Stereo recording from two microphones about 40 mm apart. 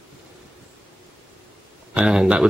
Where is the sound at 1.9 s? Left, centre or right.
Right.